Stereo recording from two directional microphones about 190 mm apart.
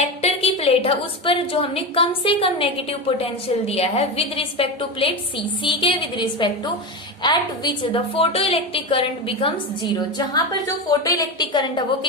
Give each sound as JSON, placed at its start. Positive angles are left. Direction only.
{"t": 0.0, "sound": "a woman's voice", "side_deg": 35}